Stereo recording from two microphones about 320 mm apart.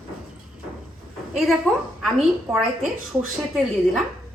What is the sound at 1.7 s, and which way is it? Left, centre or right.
A woman's voice, centre.